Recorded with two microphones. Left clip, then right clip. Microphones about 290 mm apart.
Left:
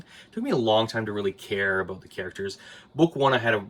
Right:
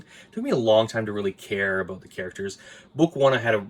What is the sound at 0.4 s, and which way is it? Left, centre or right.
Speech, centre.